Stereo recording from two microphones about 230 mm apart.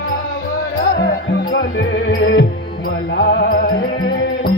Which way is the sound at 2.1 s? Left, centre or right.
Left.